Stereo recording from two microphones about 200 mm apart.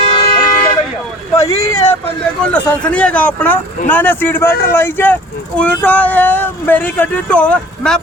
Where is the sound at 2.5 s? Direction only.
5° left (ahead or behind).